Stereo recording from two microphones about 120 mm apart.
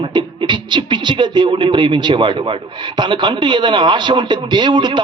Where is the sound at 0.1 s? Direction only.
40° right (ahead or behind).